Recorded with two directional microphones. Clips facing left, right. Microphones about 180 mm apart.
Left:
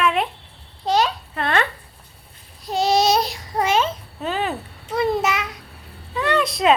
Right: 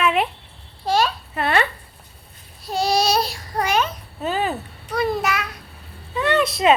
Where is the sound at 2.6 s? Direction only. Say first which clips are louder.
Left 2 dB; 20° left (ahead or behind).